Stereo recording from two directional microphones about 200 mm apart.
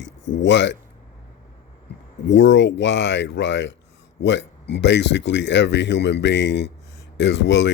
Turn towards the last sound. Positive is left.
turn(degrees=60)  # may be behind; listen again after turning